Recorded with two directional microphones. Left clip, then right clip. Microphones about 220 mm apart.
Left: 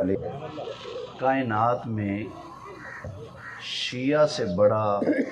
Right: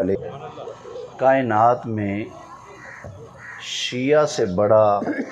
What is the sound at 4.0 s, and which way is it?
Speech, 55° right (ahead or behind).